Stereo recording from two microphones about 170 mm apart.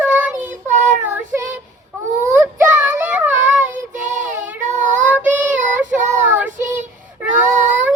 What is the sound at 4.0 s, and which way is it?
Child singing, 45° right (ahead or behind).